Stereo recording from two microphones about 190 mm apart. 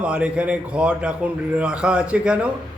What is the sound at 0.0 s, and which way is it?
A man's voice, 5° right (ahead or behind).